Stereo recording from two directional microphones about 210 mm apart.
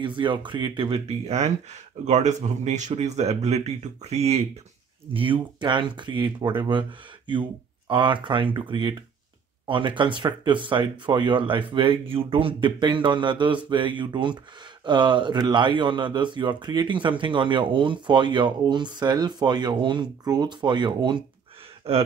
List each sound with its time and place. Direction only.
0.0 s speech: 25° right (ahead or behind)